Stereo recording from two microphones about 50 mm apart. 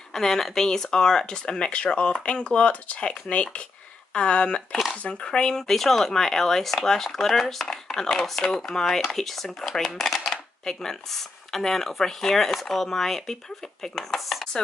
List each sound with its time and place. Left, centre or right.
0.1 s speech: centre